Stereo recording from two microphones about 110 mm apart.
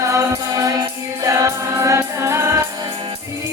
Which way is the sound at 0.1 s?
30° right (ahead or behind).